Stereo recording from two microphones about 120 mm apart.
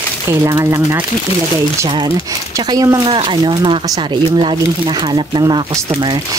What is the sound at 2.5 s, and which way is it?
Speech, 30° right (ahead or behind).